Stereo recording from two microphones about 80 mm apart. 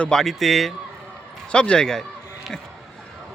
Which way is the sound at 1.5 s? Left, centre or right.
Centre.